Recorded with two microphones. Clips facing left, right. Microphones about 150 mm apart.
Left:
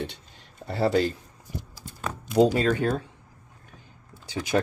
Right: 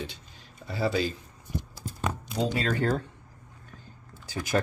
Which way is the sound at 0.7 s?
60° left (ahead or behind).